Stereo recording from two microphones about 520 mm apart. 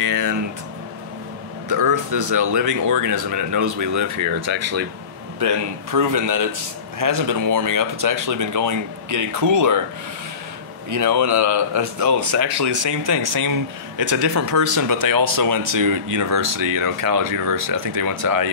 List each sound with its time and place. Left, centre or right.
0.0 s a sound: right
1.7 s speech: right
10.9 s speech: right